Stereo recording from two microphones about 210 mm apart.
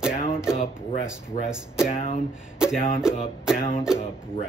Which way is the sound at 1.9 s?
30° left (ahead or behind).